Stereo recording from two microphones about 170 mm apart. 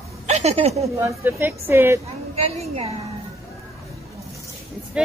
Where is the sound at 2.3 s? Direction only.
35° right (ahead or behind).